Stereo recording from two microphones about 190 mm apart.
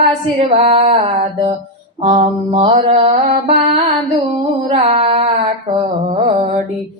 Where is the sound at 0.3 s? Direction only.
30° right (ahead or behind).